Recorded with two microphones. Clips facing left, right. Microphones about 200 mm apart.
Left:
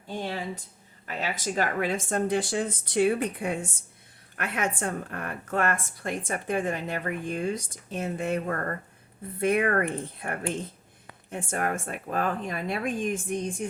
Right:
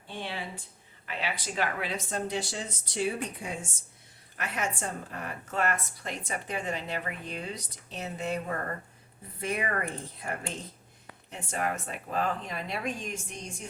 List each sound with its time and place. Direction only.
0.1 s a woman's voice: 45° left (ahead or behind)